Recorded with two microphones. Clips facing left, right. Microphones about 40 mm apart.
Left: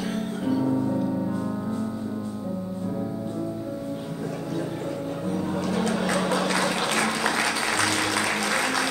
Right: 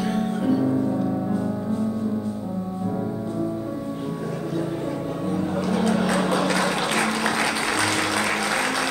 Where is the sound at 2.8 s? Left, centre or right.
Centre.